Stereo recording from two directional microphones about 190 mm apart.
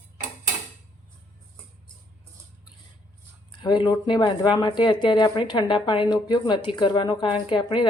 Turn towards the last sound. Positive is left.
turn(degrees=25)  # may be behind; listen again after turning